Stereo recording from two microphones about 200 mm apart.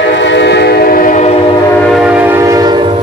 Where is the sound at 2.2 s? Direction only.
15° right (ahead or behind).